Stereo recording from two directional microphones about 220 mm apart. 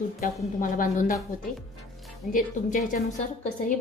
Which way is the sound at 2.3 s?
35° left (ahead or behind).